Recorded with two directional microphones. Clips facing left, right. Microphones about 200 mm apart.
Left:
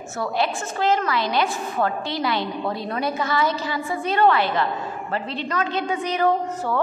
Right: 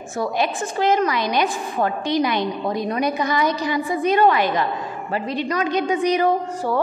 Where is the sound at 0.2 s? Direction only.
15° right (ahead or behind).